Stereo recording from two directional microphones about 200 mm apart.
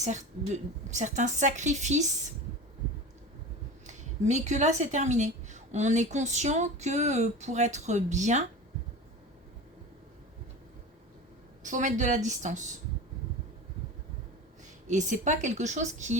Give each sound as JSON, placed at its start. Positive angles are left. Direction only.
{"t": 0.0, "sound": "a woman's voice", "side_deg": -35}
{"t": 3.8, "sound": "a woman's voice", "side_deg": -35}
{"t": 11.6, "sound": "a woman's voice", "side_deg": -40}
{"t": 14.8, "sound": "a woman's voice", "side_deg": -40}